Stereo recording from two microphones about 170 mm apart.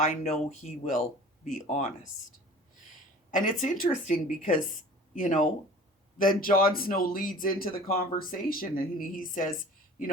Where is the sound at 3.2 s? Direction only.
50° left (ahead or behind).